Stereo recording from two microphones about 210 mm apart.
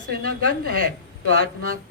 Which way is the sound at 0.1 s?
45° right (ahead or behind).